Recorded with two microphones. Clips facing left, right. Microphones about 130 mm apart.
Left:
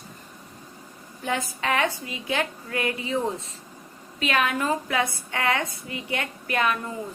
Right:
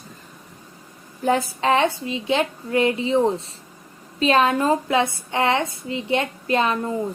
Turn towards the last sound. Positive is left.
turn(degrees=-25)  # may be behind; listen again after turning